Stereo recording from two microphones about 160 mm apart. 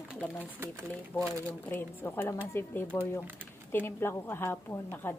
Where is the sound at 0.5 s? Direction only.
15° right (ahead or behind).